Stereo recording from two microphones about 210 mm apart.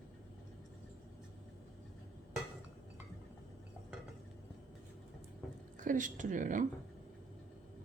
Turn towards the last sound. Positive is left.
turn(degrees=-40)  # may be behind; listen again after turning